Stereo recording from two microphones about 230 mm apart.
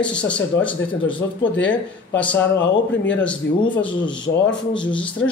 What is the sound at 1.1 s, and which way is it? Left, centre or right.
Mantra, left.